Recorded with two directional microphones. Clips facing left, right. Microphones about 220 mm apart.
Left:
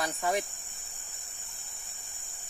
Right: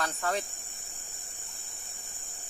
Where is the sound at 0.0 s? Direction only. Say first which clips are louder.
Left 2 dB; 15° left (ahead or behind).